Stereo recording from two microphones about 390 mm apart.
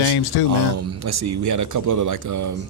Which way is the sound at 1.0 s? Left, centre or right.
Right.